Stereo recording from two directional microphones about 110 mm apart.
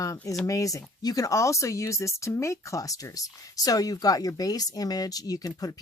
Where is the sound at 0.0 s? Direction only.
30° left (ahead or behind).